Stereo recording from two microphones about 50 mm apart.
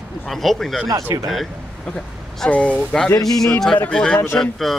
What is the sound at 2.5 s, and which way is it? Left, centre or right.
Speech, left.